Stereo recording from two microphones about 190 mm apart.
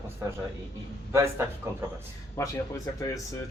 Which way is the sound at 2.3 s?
15° left (ahead or behind).